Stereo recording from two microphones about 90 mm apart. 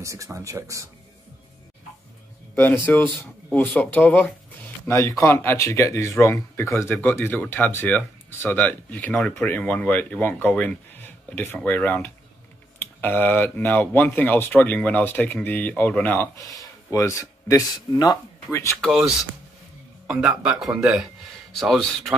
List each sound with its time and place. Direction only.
0.0 s speech: 35° right (ahead or behind)
2.5 s speech: 20° left (ahead or behind)
4.8 s speech: 35° left (ahead or behind)
16.3 s speech: 40° left (ahead or behind)
18.5 s speech: 35° left (ahead or behind)
18.9 s speech: 10° right (ahead or behind)